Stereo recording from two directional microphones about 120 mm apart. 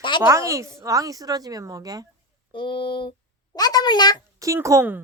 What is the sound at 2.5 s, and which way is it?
A child's voice, 45° left (ahead or behind).